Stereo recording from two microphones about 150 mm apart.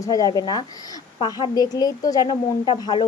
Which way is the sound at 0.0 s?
25° left (ahead or behind).